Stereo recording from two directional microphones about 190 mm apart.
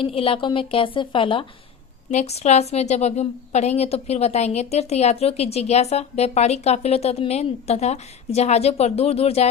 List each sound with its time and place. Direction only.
0.0 s a woman's voice: 30° left (ahead or behind)